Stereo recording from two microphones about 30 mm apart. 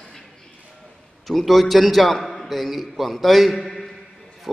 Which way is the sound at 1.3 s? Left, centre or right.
Centre.